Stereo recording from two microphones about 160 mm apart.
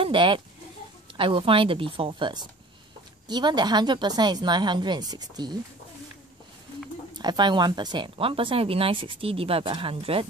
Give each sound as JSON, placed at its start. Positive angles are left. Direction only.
{"t": 0.0, "sound": "a woman's voice", "side_deg": -30}
{"t": 7.2, "sound": "speech", "side_deg": -25}